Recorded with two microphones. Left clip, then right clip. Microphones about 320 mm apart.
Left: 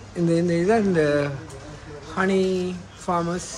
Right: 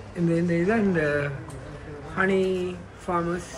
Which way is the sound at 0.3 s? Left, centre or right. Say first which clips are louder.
Left 4 dB; centre.